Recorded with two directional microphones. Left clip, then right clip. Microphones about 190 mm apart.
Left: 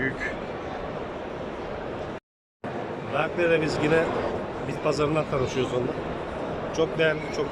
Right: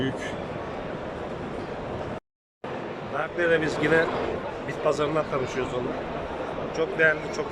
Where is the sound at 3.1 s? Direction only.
5° left (ahead or behind).